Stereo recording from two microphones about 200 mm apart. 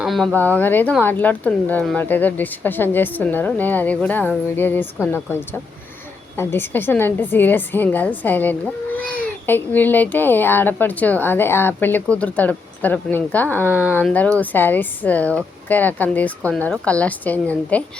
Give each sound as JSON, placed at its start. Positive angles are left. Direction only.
{"t": 0.0, "sound": "a woman's voice", "side_deg": 0}
{"t": 13.7, "sound": "speech", "side_deg": -10}
{"t": 13.9, "sound": "a woman's voice", "side_deg": 5}